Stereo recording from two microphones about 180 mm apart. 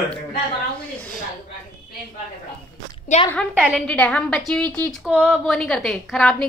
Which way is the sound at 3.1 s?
40° left (ahead or behind).